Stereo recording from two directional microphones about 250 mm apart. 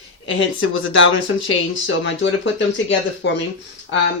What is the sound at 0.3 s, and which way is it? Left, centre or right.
Speech, left.